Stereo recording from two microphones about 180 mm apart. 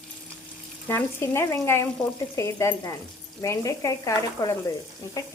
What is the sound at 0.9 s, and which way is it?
Speech, 15° left (ahead or behind).